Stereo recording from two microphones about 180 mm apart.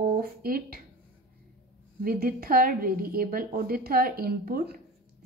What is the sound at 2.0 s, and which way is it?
A woman's voice, 55° right (ahead or behind).